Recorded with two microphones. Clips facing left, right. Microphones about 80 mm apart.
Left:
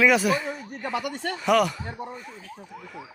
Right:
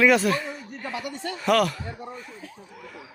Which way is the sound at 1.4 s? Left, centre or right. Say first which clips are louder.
Even; centre.